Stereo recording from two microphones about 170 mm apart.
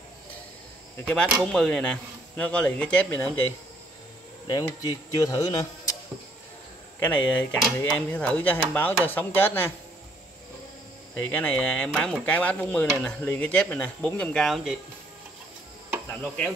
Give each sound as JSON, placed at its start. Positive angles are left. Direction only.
{"t": 1.0, "sound": "speech", "side_deg": 5}
{"t": 4.5, "sound": "speech", "side_deg": 20}
{"t": 7.0, "sound": "speech", "side_deg": 10}
{"t": 11.1, "sound": "speech", "side_deg": 10}